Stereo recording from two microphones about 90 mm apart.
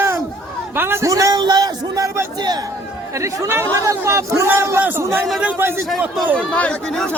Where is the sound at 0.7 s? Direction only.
25° right (ahead or behind).